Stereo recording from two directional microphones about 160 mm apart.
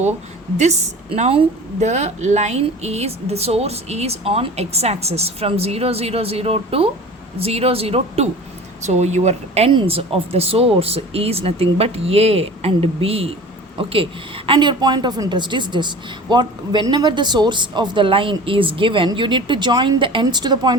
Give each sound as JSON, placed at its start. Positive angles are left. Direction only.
{"t": 0.5, "sound": "a woman's voice", "side_deg": -45}